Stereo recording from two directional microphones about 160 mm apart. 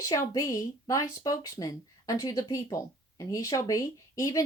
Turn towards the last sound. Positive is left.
turn(degrees=20)  # may be behind; listen again after turning